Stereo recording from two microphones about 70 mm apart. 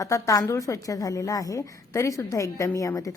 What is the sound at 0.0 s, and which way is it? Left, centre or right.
A woman's voice, left.